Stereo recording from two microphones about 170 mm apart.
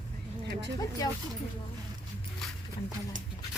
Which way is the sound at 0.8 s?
20° left (ahead or behind).